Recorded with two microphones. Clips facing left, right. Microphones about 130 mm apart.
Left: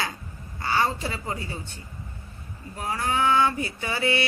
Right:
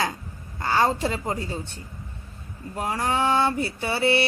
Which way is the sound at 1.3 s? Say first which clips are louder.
Right 4 dB; 40° right (ahead or behind).